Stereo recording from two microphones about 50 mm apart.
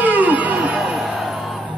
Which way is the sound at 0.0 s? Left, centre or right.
Right.